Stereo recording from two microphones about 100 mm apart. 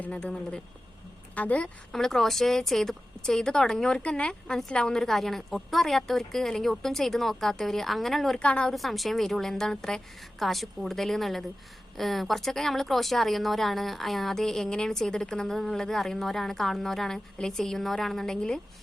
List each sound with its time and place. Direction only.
0.0 s speech: 10° left (ahead or behind)
8.7 s speech: centre (ahead or behind)